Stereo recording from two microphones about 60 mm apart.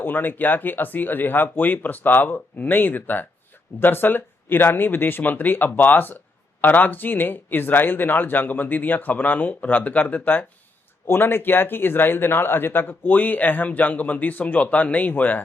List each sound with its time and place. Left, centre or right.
0.0 s speech: left